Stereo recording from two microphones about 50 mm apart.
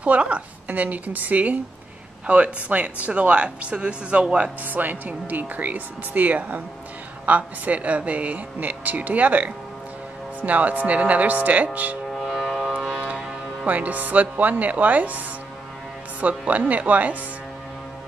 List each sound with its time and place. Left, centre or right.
0.0 s speech: right
4.6 s speech: right
12.1 s civil defense siren: centre
12.9 s vehicle: right
13.7 s speech: right